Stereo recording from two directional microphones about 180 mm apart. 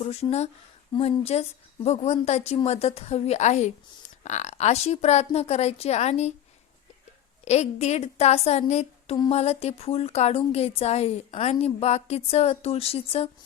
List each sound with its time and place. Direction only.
0.0 s a woman's voice: 35° left (ahead or behind)
7.4 s a woman's voice: 40° left (ahead or behind)